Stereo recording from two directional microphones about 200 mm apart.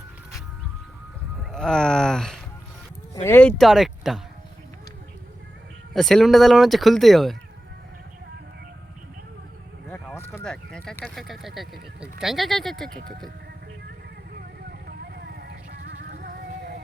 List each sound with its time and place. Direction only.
1.5 s speech: 5° left (ahead or behind)
3.6 s speech: centre (ahead or behind)
5.9 s speech: centre (ahead or behind)
9.9 s a sound: 10° left (ahead or behind)
11.0 s speech: centre (ahead or behind)
14.7 s music: 50° right (ahead or behind)